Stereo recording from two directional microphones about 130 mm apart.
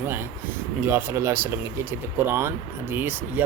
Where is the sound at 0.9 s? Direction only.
20° right (ahead or behind).